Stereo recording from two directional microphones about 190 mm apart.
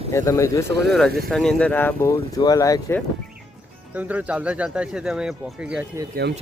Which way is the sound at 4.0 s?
10° right (ahead or behind).